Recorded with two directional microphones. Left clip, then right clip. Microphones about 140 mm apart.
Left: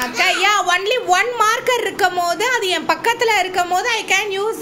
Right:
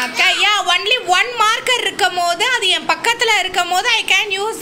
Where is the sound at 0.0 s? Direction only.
25° left (ahead or behind).